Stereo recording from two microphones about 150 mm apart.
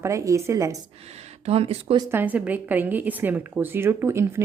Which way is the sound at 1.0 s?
45° right (ahead or behind).